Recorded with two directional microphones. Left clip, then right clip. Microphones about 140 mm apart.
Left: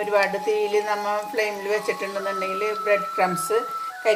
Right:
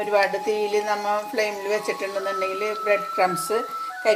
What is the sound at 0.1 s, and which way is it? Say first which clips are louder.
Speech: even; 50° right (ahead or behind).